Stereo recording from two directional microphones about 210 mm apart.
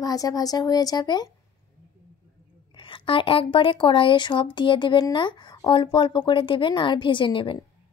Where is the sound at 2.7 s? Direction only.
25° left (ahead or behind).